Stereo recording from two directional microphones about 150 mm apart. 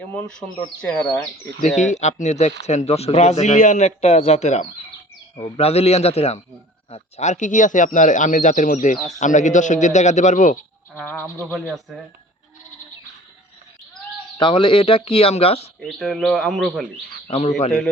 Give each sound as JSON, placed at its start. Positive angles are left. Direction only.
{"t": 0.8, "sound": "speech", "side_deg": 5}
{"t": 1.6, "sound": "speech", "side_deg": 50}
{"t": 10.9, "sound": "speech", "side_deg": 10}
{"t": 11.7, "sound": "speech", "side_deg": 0}
{"t": 14.3, "sound": "speech", "side_deg": 35}
{"t": 15.8, "sound": "speech", "side_deg": 0}
{"t": 17.2, "sound": "a man's voice", "side_deg": 45}